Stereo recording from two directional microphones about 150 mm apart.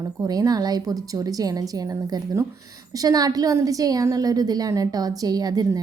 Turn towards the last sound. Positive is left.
turn(degrees=-25)  # may be behind; listen again after turning